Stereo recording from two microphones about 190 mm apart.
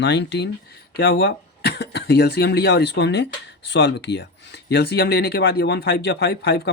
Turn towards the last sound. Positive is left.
turn(degrees=60)  # may be behind; listen again after turning